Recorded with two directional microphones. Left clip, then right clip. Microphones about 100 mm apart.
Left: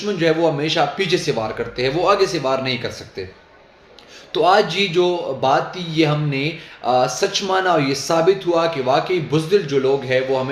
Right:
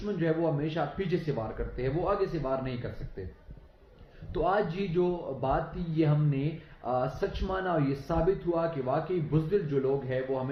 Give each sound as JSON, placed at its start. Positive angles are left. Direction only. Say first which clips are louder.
{"t": 0.2, "sound": "speech", "louder": "left 12 dB", "side_deg": 35}